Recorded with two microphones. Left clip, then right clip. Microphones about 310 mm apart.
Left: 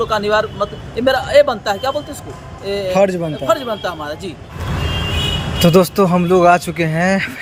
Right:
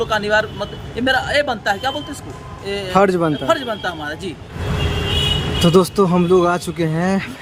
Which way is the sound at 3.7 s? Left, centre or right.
Right.